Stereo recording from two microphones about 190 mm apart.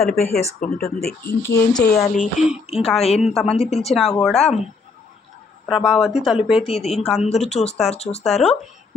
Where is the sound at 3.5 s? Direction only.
35° left (ahead or behind).